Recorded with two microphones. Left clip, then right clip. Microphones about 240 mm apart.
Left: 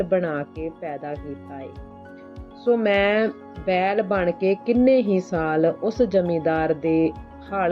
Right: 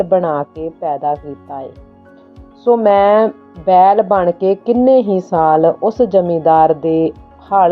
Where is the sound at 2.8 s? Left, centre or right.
Centre.